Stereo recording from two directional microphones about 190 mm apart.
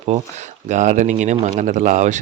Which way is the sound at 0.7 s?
40° right (ahead or behind).